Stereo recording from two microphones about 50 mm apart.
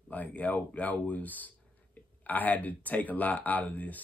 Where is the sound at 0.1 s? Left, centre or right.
Left.